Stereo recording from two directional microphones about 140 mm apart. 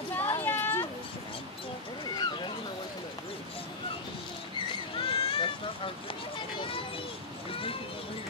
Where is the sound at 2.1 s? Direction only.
35° left (ahead or behind).